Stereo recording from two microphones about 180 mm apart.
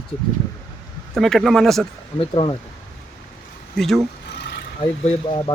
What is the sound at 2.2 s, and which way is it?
Speech, 30° left (ahead or behind).